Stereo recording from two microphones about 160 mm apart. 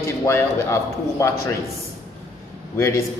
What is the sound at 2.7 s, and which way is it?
Speech, 15° left (ahead or behind).